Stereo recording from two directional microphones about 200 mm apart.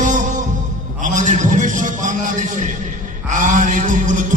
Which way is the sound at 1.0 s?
40° right (ahead or behind).